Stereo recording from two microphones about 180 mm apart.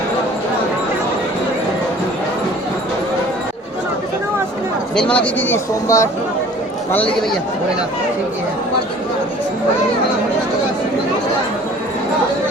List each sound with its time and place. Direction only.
4.9 s speech: 5° left (ahead or behind)